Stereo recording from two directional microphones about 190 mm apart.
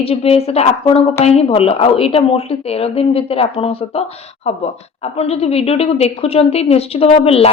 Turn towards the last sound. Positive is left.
turn(degrees=30)  # may be behind; listen again after turning